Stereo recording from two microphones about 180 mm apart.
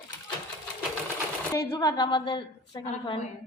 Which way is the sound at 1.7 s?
20° left (ahead or behind).